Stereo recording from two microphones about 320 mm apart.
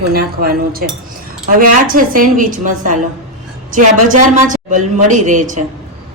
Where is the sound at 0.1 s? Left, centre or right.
Right.